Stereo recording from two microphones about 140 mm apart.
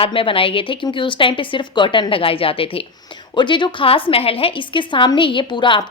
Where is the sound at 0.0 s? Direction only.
40° left (ahead or behind).